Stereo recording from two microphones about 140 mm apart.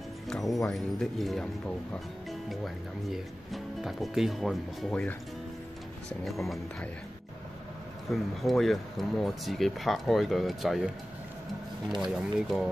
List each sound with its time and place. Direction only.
0.3 s music: centre (ahead or behind)
0.7 s speech: centre (ahead or behind)
2.5 s speech: centre (ahead or behind)
6.2 s speech: centre (ahead or behind)
8.1 s speech: centre (ahead or behind)
11.9 s speech: centre (ahead or behind)